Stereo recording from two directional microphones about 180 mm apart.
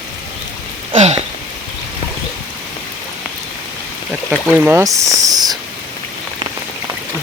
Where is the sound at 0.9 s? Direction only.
35° right (ahead or behind).